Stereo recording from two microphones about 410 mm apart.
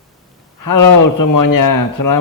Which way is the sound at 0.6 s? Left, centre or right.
Left.